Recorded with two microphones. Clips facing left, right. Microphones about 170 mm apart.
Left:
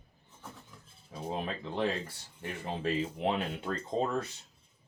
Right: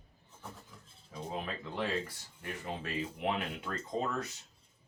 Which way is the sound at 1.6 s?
25° left (ahead or behind).